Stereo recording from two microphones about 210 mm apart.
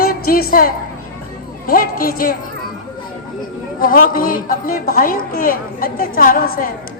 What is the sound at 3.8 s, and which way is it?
A woman's voice, 40° left (ahead or behind).